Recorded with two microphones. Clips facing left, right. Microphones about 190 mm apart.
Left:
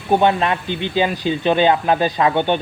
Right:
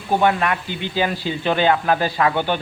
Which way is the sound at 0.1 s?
20° left (ahead or behind).